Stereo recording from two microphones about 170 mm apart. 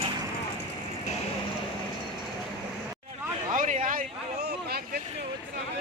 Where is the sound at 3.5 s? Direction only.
50° right (ahead or behind).